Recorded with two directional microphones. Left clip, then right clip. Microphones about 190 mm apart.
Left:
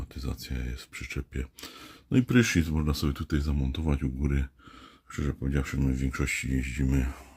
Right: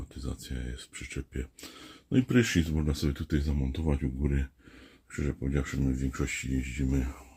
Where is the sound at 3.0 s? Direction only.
20° left (ahead or behind); by 7.2 s 40° left (ahead or behind).